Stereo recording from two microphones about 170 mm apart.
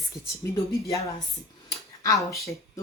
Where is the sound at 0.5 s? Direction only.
20° left (ahead or behind).